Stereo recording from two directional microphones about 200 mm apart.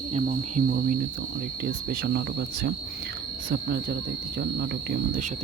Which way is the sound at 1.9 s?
55° right (ahead or behind).